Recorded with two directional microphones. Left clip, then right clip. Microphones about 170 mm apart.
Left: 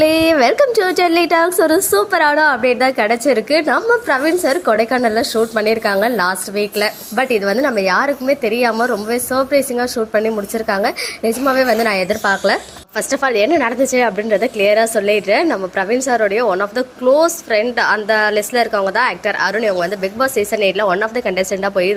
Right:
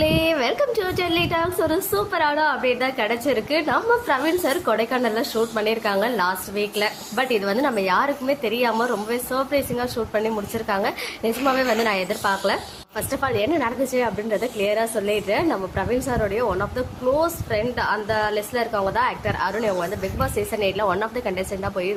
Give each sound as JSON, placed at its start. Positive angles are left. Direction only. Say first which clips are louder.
{"t": 0.0, "sound": "a woman's voice", "louder": "left 8 dB", "side_deg": 35}